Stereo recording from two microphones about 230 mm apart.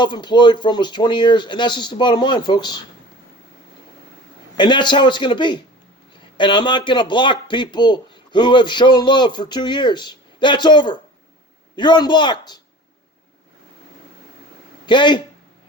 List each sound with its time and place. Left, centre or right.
0.0 s a man's voice: centre
4.5 s a man's voice: centre
14.8 s a man's voice: centre